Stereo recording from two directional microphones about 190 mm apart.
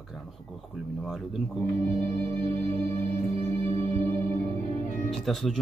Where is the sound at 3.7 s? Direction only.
30° right (ahead or behind).